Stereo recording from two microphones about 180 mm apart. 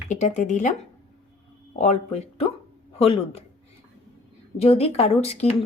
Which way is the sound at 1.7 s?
40° left (ahead or behind).